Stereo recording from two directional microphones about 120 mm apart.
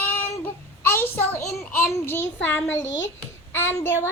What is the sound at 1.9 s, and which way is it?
Speech, 20° left (ahead or behind).